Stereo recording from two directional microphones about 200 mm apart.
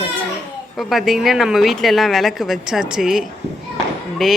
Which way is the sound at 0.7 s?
Centre (ahead or behind).